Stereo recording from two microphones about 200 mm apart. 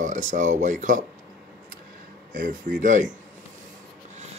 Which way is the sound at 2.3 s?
40° right (ahead or behind).